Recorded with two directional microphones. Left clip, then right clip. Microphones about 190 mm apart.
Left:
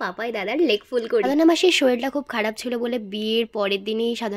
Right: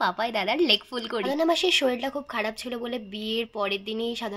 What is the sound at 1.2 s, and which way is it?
Speech, 35° left (ahead or behind).